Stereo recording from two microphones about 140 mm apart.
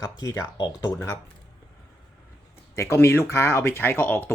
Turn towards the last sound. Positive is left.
turn(degrees=15)  # may be behind; listen again after turning